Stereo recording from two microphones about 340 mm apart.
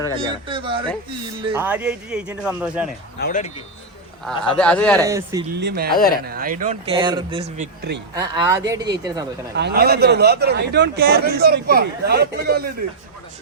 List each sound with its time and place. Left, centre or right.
0.4 s speech: centre
1.6 s a man's voice: centre
3.2 s speech: left
4.3 s a man's voice: centre
5.0 s speech: centre
5.5 s a man's voice: right
7.8 s a man's voice: right
8.1 s speech: centre
9.6 s a man's voice: right